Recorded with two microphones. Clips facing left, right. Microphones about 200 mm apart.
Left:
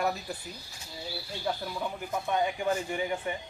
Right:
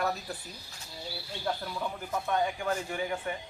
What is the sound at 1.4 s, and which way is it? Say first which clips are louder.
Speech: left 1 dB; 10° left (ahead or behind).